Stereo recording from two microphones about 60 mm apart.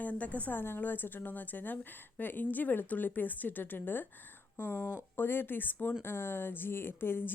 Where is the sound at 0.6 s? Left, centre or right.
Left.